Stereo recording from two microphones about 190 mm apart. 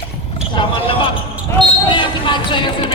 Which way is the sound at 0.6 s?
25° left (ahead or behind).